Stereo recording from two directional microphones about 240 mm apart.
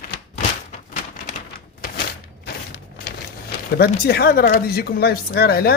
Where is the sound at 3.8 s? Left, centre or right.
Left.